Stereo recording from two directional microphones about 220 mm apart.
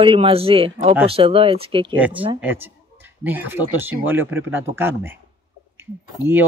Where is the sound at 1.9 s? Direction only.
5° right (ahead or behind).